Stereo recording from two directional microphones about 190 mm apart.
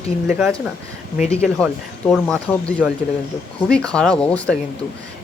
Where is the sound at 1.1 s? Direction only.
30° left (ahead or behind).